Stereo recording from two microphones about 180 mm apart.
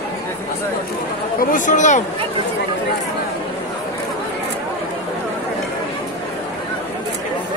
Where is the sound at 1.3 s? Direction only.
45° left (ahead or behind).